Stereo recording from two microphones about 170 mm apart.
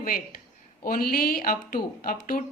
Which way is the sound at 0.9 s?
60° left (ahead or behind).